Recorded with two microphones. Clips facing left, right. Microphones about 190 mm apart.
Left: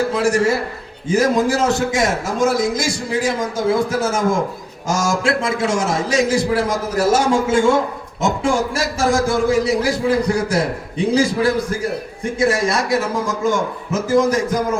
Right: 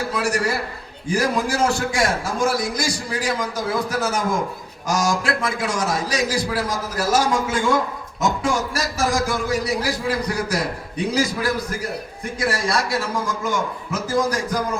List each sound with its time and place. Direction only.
0.1 s a man's voice: 25° left (ahead or behind)